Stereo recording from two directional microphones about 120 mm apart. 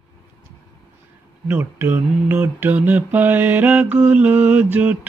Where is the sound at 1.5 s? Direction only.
15° right (ahead or behind).